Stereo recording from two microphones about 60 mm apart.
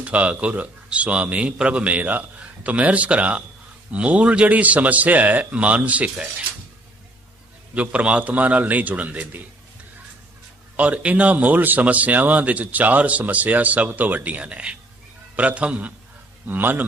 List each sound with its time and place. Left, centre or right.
0.0 s speech: right
7.8 s speech: right
10.8 s speech: right
16.5 s a man's voice: right